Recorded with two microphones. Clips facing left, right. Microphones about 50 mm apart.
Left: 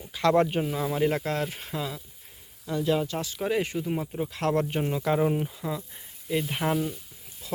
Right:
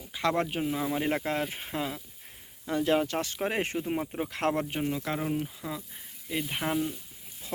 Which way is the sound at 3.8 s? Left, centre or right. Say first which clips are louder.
Left 1 dB; right.